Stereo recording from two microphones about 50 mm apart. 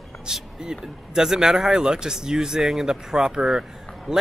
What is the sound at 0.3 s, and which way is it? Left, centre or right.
Speech, centre.